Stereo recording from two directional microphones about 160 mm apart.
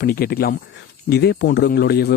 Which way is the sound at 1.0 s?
90° left.